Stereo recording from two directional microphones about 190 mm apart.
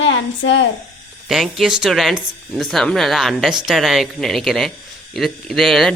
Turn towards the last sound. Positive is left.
turn(degrees=0)  # may be behind; listen again after turning